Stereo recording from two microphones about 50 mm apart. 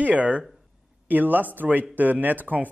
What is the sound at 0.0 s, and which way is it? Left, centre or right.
Speech, right.